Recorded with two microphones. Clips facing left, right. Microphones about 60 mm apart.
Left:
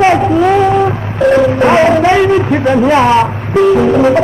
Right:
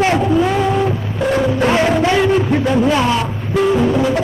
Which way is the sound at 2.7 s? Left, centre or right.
Left.